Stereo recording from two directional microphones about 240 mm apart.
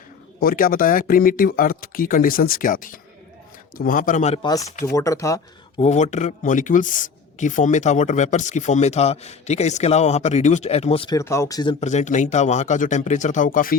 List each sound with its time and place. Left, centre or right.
0.3 s speech: left
4.4 s speech: centre
5.8 s a man's voice: left